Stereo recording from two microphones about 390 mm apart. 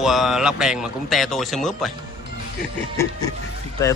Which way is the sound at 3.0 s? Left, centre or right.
Centre.